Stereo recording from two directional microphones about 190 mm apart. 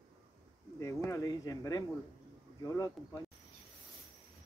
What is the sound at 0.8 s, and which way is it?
Speech, 15° left (ahead or behind).